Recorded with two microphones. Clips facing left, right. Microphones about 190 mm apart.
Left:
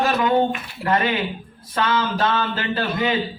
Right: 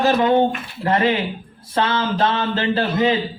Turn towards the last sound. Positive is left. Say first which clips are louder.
# right 4 dB
turn(degrees=-30)  # may be behind; listen again after turning